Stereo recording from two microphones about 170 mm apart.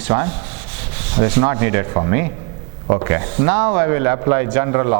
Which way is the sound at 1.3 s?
15° right (ahead or behind).